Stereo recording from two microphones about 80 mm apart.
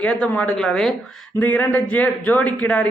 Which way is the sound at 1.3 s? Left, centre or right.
Left.